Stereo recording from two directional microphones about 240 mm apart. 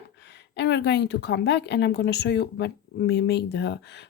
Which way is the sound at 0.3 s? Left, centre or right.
Left.